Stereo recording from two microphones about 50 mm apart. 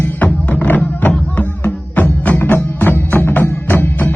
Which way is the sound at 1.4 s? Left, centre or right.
Left.